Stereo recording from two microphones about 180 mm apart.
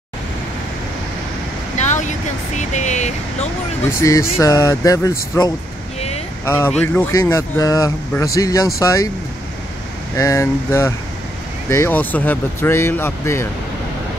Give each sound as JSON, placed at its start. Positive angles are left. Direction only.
{"t": 1.8, "sound": "speech", "side_deg": 40}
{"t": 4.0, "sound": "speech", "side_deg": 15}
{"t": 5.9, "sound": "vehicle", "side_deg": 35}
{"t": 6.4, "sound": "speech", "side_deg": 15}
{"t": 10.1, "sound": "speech", "side_deg": 15}